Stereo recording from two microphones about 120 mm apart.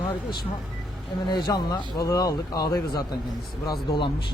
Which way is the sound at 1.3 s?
35° left (ahead or behind).